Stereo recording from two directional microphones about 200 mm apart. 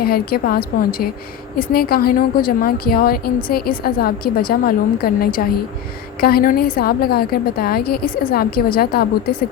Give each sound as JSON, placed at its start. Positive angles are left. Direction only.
{"t": 0.0, "sound": "a woman's voice", "side_deg": 50}